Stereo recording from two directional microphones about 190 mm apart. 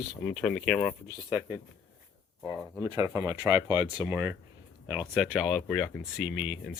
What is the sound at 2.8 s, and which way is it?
Speech, 15° right (ahead or behind).